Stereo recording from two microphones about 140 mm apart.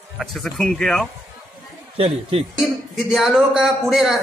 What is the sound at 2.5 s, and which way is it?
Speech, centre (ahead or behind).